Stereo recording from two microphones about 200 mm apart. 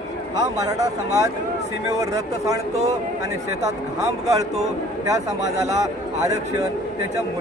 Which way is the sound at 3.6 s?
15° right (ahead or behind).